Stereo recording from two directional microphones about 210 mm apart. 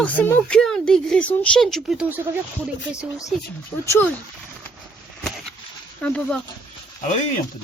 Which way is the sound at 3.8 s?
15° left (ahead or behind).